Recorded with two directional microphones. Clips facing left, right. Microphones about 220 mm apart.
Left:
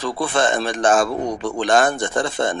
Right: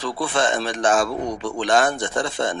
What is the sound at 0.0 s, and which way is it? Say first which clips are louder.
Speech: left 2 dB; 50° left (ahead or behind).